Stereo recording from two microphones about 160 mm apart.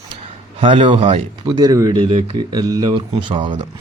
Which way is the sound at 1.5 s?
20° right (ahead or behind).